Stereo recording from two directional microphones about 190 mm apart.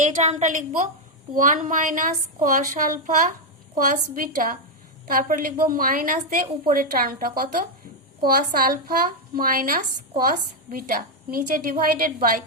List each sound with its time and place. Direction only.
0.0 s a woman's voice: 35° right (ahead or behind)